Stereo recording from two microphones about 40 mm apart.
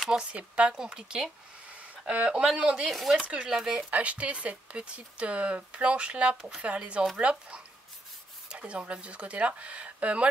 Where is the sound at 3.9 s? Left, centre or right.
Right.